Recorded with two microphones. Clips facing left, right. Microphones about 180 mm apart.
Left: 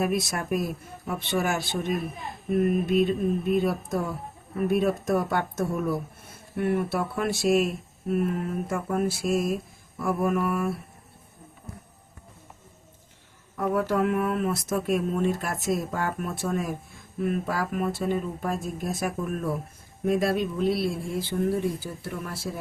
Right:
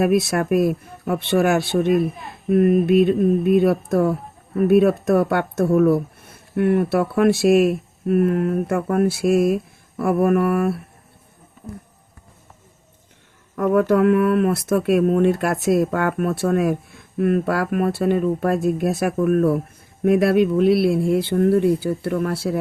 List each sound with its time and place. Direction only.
0.0 s speech: 65° right (ahead or behind)
13.6 s speech: 70° right (ahead or behind)